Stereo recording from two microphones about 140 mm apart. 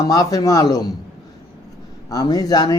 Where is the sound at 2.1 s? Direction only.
25° left (ahead or behind).